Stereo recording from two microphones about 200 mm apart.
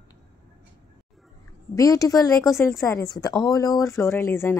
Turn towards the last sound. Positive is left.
turn(degrees=15)  # may be behind; listen again after turning